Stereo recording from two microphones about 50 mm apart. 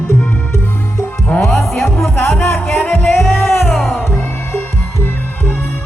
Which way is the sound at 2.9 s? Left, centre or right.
Left.